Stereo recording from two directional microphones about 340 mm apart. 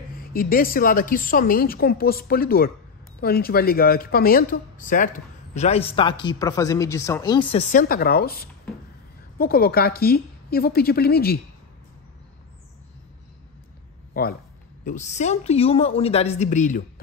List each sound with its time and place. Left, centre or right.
0.2 s speech: left
14.2 s a woman's voice: left